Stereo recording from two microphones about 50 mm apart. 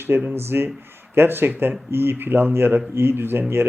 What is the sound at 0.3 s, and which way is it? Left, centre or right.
Speech, right.